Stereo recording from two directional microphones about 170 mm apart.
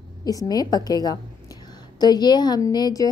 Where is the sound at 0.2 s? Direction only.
20° left (ahead or behind).